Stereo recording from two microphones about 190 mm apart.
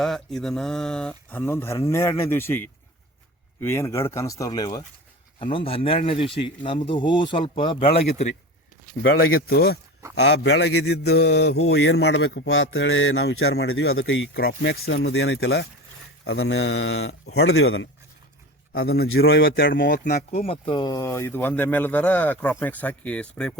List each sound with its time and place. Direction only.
0.0 s speech: centre (ahead or behind); by 8.0 s 30° left (ahead or behind)
8.9 s speech: 45° right (ahead or behind)
9.5 s speech: 55° left (ahead or behind)
10.2 s mantra: 65° left (ahead or behind); by 17.8 s 90° left
19.0 s mantra: 90° left
19.3 s speech: 50° left (ahead or behind); by 23.6 s 5° left (ahead or behind)